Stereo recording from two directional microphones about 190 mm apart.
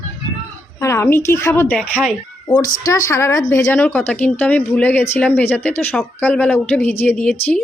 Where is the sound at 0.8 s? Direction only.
15° left (ahead or behind).